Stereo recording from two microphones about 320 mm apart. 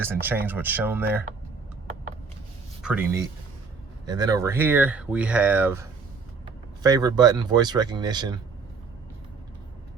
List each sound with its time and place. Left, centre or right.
0.0 s speech: centre
2.8 s speech: centre
6.8 s speech: centre